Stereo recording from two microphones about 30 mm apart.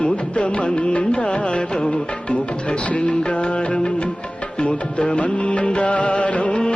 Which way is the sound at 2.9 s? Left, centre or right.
Left.